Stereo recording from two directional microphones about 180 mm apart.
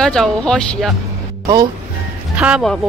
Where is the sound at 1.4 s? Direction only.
20° right (ahead or behind).